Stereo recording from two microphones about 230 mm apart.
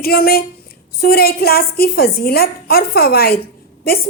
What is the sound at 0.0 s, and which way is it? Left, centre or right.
A woman's voice, left.